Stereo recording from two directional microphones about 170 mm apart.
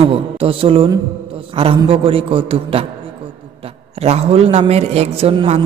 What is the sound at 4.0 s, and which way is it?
A man's voice, 35° right (ahead or behind).